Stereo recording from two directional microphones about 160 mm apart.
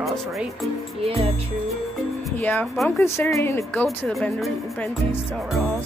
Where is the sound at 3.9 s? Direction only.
5° left (ahead or behind).